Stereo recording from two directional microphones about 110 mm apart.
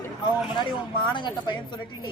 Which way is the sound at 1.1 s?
45° left (ahead or behind).